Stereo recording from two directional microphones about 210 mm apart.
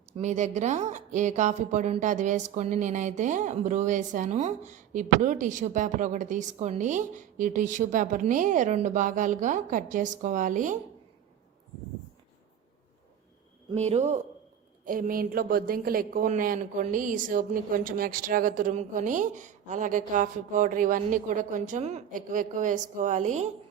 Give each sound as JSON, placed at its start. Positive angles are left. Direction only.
{"t": 0.2, "sound": "a woman's voice", "side_deg": -35}
{"t": 13.7, "sound": "a woman's voice", "side_deg": -30}